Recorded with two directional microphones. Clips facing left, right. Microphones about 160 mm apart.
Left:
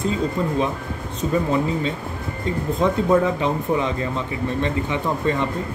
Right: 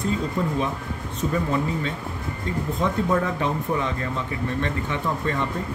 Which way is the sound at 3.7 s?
20° left (ahead or behind).